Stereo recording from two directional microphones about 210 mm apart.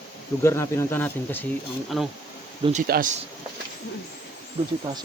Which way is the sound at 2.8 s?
40° right (ahead or behind).